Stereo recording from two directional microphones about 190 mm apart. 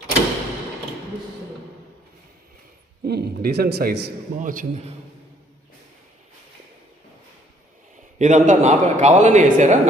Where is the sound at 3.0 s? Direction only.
55° right (ahead or behind).